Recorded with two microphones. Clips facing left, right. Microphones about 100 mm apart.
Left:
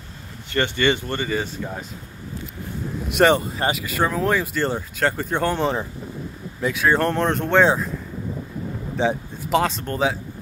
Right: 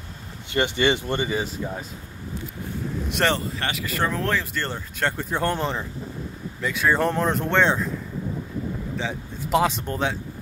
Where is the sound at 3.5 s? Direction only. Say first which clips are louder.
Left 6 dB; 25° left (ahead or behind).